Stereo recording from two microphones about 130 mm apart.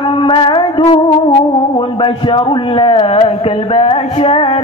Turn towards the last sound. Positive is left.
turn(degrees=45)  # may be behind; listen again after turning